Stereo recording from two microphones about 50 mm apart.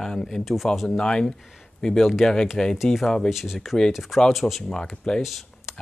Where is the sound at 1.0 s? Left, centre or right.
Centre.